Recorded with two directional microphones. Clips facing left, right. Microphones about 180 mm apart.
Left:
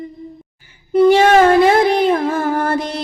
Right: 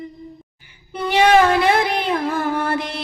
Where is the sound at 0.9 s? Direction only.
45° left (ahead or behind).